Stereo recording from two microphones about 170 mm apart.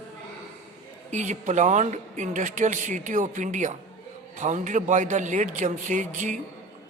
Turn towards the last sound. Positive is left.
turn(degrees=-45)  # may be behind; listen again after turning